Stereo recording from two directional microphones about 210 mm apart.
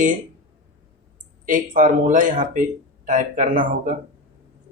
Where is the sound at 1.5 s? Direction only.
40° right (ahead or behind).